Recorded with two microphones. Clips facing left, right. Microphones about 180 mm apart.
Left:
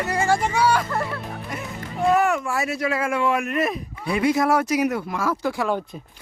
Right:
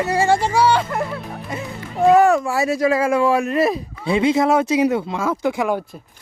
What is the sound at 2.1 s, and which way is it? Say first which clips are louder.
Speech: right 6 dB; 30° right (ahead or behind).